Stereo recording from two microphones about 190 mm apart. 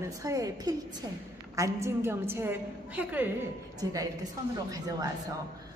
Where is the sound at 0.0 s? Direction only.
15° right (ahead or behind).